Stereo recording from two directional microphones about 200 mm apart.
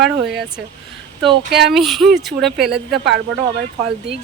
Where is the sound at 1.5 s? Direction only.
55° right (ahead or behind).